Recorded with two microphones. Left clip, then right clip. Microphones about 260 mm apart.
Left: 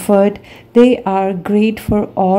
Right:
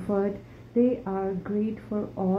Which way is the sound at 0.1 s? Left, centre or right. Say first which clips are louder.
Left 16 dB; left.